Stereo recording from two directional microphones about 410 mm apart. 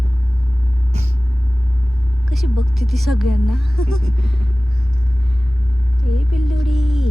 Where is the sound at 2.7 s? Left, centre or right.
Centre.